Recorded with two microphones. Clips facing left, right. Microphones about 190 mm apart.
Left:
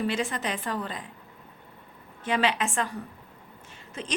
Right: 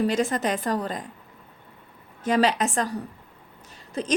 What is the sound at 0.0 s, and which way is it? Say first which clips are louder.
A woman's voice: right 5 dB; 40° right (ahead or behind).